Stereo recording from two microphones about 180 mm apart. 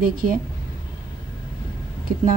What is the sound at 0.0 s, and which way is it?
Speech, 50° right (ahead or behind).